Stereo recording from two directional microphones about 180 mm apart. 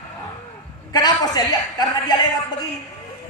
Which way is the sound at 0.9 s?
20° left (ahead or behind).